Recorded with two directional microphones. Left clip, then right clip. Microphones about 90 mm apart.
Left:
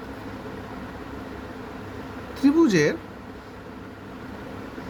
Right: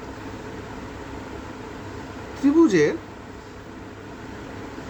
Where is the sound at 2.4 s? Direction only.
55° left (ahead or behind).